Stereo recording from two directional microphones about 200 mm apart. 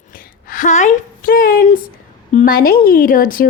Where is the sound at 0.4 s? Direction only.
40° left (ahead or behind).